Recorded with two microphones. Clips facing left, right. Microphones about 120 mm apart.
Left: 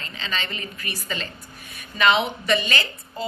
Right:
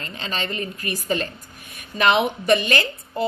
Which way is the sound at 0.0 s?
45° right (ahead or behind).